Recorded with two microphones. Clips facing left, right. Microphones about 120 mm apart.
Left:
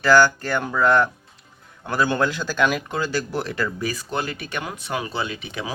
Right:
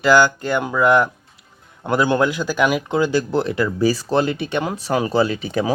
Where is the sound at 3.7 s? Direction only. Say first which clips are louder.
Right 9 dB; 30° right (ahead or behind).